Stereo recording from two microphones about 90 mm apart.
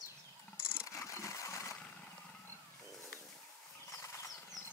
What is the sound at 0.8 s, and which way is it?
Sewing machine, 35° left (ahead or behind).